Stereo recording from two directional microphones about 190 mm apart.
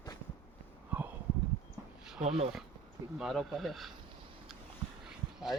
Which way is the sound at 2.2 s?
40° right (ahead or behind).